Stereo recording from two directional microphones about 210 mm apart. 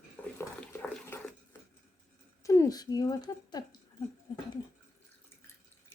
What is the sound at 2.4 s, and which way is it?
Speech, 15° left (ahead or behind).